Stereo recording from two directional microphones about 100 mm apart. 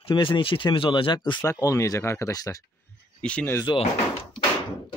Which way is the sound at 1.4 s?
30° left (ahead or behind).